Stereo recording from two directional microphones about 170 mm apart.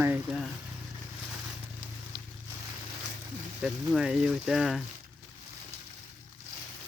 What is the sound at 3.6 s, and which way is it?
Speech, 5° right (ahead or behind).